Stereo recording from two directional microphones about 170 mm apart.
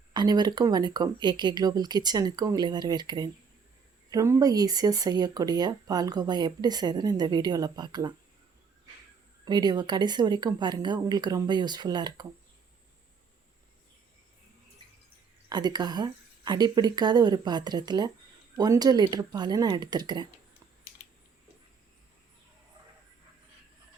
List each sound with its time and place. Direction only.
0.1 s speech: 25° right (ahead or behind)
9.4 s speech: 25° right (ahead or behind)
15.4 s speech: 25° right (ahead or behind)